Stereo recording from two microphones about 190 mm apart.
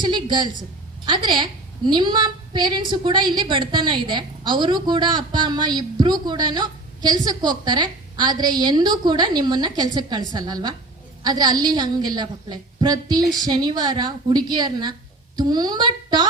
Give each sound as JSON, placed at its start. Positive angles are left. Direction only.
{"t": 0.0, "sound": "a woman's voice", "side_deg": -25}